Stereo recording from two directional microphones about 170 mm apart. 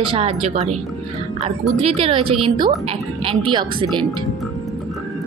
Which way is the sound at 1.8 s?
35° right (ahead or behind).